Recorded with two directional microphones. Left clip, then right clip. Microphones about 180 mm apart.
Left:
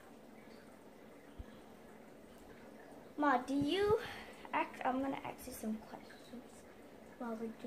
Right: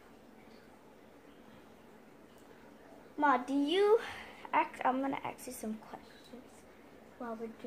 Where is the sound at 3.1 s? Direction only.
25° right (ahead or behind).